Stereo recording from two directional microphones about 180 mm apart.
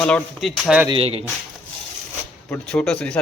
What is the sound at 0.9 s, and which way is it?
Speech, 30° right (ahead or behind).